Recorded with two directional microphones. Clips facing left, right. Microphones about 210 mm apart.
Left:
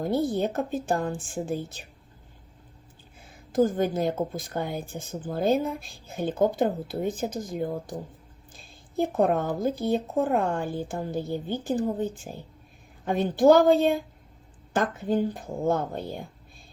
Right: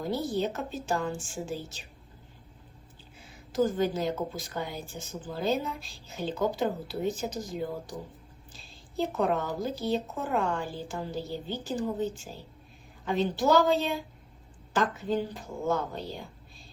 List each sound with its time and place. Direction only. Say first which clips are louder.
0.0 s speech: left 4 dB; 55° left (ahead or behind)
3.5 s speech: left 3 dB; 50° left (ahead or behind)